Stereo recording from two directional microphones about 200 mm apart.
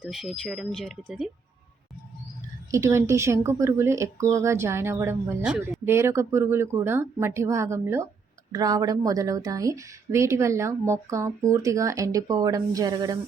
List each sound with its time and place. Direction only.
0.0 s speech: centre (ahead or behind)
2.7 s a woman's voice: 15° right (ahead or behind)